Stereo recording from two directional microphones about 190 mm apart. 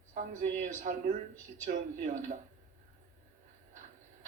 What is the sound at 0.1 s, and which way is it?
Speech, 40° right (ahead or behind).